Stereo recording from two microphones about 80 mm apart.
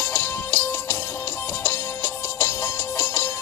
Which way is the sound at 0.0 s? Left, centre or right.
Left.